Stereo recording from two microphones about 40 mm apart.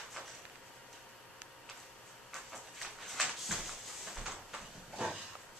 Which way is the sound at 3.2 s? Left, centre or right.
Centre.